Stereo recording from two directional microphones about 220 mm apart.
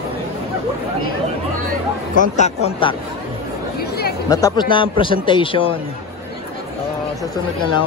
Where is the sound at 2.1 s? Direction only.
30° left (ahead or behind).